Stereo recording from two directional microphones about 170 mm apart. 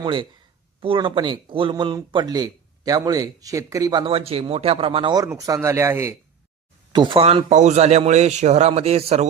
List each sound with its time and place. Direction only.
0.0 s speech: 30° right (ahead or behind)
4.0 s speech: 35° right (ahead or behind); by 6.1 s 15° right (ahead or behind)
6.9 s a man's voice: 30° right (ahead or behind)